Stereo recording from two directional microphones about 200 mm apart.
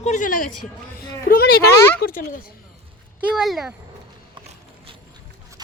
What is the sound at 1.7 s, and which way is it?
Speech, 15° left (ahead or behind).